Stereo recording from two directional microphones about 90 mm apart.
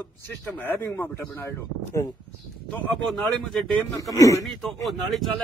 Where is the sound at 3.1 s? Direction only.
5° left (ahead or behind).